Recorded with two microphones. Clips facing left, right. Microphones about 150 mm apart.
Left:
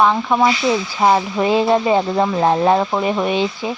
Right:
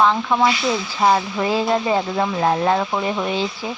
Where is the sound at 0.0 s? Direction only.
15° left (ahead or behind).